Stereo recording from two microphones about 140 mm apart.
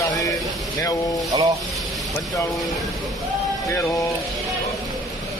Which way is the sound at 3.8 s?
20° left (ahead or behind).